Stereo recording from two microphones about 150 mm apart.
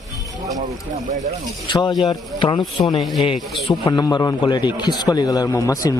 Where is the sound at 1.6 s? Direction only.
30° left (ahead or behind).